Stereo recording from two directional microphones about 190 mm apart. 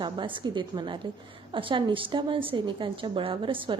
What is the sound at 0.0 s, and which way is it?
A woman's voice, 25° right (ahead or behind).